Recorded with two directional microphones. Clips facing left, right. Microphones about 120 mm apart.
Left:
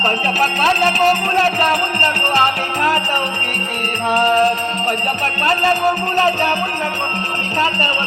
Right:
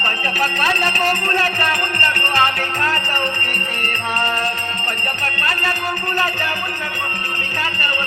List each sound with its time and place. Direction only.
0.6 s music: 15° left (ahead or behind)
4.1 s music: 15° left (ahead or behind)